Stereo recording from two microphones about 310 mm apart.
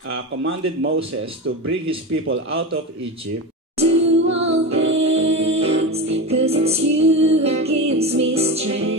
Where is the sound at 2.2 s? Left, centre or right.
Right.